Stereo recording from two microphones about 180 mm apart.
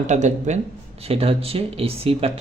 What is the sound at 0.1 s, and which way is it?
A man's voice, 40° right (ahead or behind).